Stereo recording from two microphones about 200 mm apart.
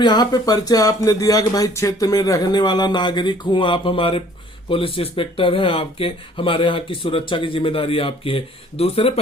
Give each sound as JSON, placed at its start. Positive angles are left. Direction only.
{"t": 0.0, "sound": "speech", "side_deg": 20}